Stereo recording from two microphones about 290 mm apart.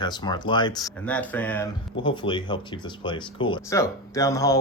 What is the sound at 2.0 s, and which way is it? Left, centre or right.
Speech, centre.